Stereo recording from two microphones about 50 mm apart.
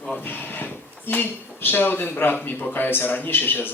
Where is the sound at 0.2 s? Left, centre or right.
Left.